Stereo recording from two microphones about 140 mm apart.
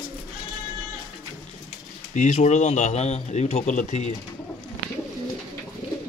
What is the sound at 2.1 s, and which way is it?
Speech, 60° left (ahead or behind).